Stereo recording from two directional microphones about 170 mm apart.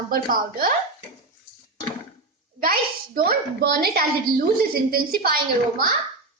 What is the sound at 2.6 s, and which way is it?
A woman's voice, 55° right (ahead or behind).